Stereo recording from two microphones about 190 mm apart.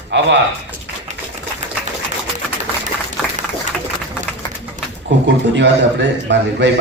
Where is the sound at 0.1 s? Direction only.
65° right (ahead or behind).